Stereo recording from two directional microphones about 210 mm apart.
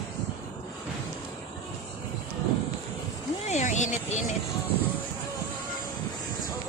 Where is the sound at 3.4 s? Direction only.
35° left (ahead or behind).